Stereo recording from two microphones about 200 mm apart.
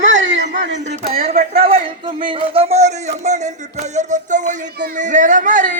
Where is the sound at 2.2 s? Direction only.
25° right (ahead or behind).